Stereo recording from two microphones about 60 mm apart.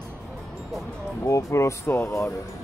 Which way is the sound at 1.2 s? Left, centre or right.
Left.